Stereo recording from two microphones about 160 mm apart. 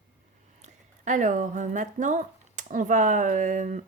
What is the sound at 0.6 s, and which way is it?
A woman's voice, 50° right (ahead or behind).